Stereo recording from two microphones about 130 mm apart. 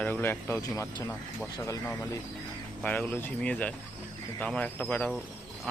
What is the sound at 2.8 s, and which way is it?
Speech, 10° left (ahead or behind).